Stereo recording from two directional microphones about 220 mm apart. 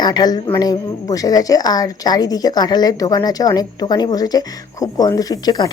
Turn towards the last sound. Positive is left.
turn(degrees=20)  # may be behind; listen again after turning